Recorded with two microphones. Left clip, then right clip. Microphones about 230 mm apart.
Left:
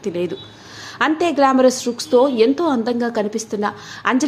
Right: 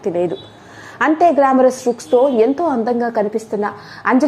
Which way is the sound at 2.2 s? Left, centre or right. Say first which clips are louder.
Even; centre.